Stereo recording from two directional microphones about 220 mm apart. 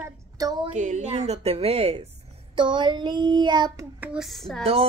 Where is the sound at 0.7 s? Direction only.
35° right (ahead or behind).